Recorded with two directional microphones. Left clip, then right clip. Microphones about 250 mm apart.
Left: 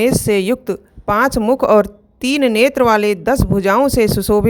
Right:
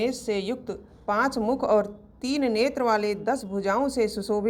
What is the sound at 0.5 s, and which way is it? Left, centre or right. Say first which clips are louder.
A woman's voice: left 14 dB; left.